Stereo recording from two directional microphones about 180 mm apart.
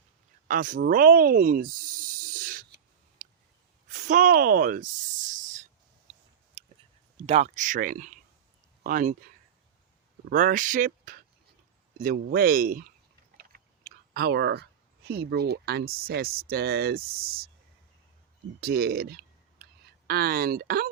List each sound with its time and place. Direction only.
0.4 s snake: 50° right (ahead or behind)
3.8 s a woman's voice: 45° right (ahead or behind)
5.3 s a sound: 45° right (ahead or behind)
6.6 s a sound: 30° right (ahead or behind)
7.3 s speech: 40° right (ahead or behind)
10.2 s speech: 50° right (ahead or behind)
18.6 s speech: 60° right (ahead or behind)